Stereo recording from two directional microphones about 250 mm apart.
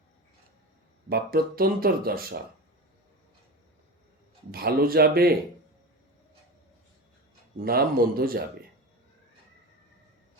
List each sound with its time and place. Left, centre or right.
1.1 s speech: right
4.5 s speech: right
7.6 s speech: right